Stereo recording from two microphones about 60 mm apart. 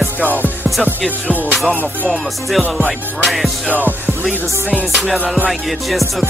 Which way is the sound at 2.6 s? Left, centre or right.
Left.